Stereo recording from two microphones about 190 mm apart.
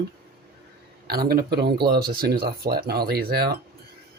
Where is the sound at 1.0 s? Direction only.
55° right (ahead or behind).